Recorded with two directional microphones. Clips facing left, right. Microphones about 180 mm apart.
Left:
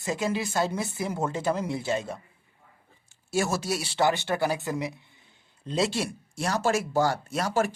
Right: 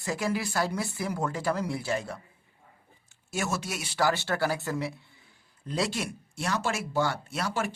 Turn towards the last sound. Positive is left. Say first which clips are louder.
# left 5 dB
turn(degrees=40)  # may be behind; listen again after turning